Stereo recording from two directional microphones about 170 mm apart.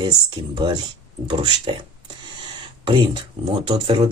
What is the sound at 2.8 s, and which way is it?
Speech, 30° right (ahead or behind).